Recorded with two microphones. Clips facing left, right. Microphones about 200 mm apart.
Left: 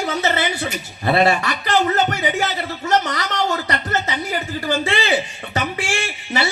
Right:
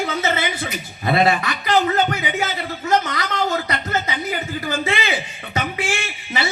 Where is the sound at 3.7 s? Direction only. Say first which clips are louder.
Left 1 dB; 35° left (ahead or behind).